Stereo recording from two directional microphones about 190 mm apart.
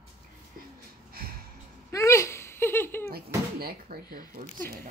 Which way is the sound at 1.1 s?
50° right (ahead or behind).